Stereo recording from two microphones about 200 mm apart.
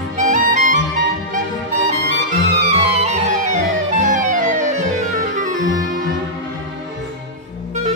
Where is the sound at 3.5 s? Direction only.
40° right (ahead or behind).